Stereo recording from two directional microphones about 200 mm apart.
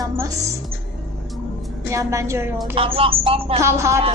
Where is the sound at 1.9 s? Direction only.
15° right (ahead or behind).